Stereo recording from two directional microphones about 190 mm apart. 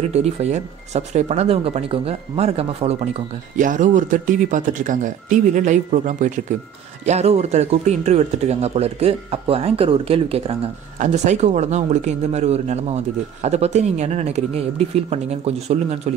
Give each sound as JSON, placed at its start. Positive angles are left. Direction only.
{"t": 0.0, "sound": "speech", "side_deg": -35}